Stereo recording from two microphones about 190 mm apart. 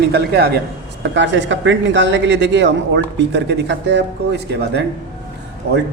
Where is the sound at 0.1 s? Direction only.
55° right (ahead or behind).